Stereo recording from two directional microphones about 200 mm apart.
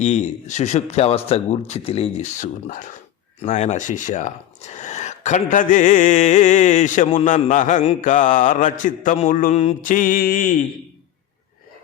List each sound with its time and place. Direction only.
0.0 s speech: 35° left (ahead or behind)